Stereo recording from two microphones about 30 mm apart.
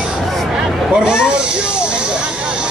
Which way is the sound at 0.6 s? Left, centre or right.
Right.